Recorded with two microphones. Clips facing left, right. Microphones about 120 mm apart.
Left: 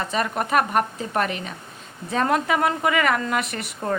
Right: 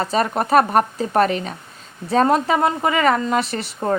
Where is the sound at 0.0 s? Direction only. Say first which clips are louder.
Right 5 dB; 35° right (ahead or behind).